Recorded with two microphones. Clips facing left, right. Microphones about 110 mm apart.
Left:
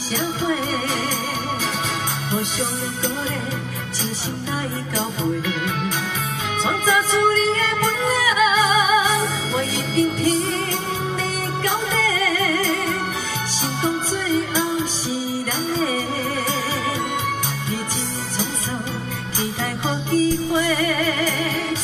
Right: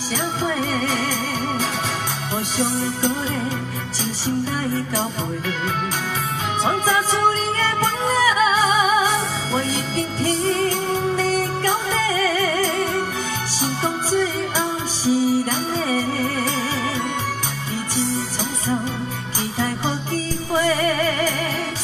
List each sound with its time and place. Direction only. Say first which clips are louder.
7.8 s music: right 3 dB; 35° right (ahead or behind)
11.6 s music: right 1 dB; 35° right (ahead or behind)
20.1 s music: left 5 dB; 35° right (ahead or behind)